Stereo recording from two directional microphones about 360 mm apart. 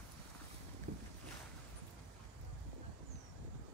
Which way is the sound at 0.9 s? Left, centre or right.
Right.